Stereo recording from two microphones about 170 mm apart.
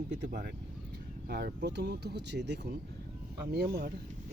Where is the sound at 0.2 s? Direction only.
70° right (ahead or behind); by 2.6 s 90° right.